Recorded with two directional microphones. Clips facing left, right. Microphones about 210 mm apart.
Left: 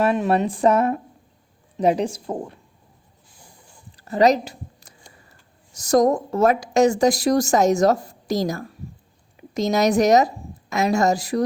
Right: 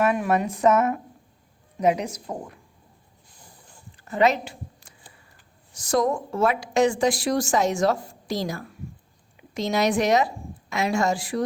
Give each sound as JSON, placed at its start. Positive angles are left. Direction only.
{"t": 0.0, "sound": "a woman's voice", "side_deg": 30}
{"t": 3.9, "sound": "a sound", "side_deg": 35}
{"t": 5.8, "sound": "a woman's voice", "side_deg": 40}